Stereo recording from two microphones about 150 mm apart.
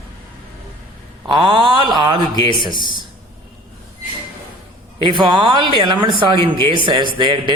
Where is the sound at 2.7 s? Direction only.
30° left (ahead or behind).